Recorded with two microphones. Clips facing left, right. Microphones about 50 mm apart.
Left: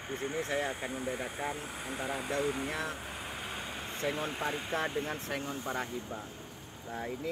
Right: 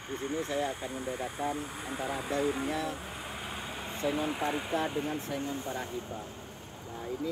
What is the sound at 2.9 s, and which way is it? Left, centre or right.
Vehicle, centre.